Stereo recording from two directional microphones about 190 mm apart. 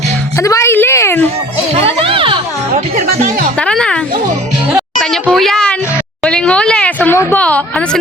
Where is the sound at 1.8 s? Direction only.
30° right (ahead or behind).